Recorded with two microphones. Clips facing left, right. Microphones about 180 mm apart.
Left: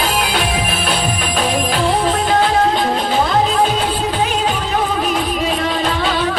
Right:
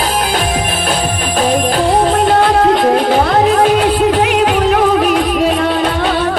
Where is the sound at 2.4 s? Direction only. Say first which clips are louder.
Right 5 dB; 65° right (ahead or behind).